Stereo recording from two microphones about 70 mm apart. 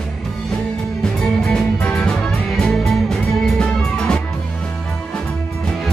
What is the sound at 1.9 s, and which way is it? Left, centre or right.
Music, centre.